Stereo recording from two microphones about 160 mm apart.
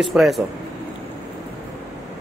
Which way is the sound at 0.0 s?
Centre (ahead or behind).